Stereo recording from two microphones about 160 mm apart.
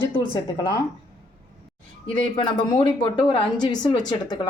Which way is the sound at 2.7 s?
30° left (ahead or behind).